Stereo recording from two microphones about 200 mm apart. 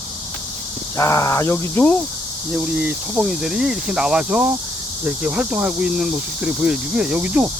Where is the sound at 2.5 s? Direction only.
5° right (ahead or behind).